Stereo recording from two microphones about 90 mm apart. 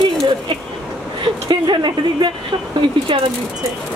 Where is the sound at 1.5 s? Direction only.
55° right (ahead or behind).